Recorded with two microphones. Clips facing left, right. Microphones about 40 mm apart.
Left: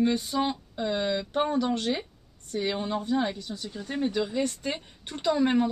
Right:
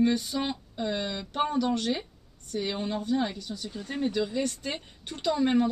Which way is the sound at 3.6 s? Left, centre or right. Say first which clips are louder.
Left 1 dB; centre.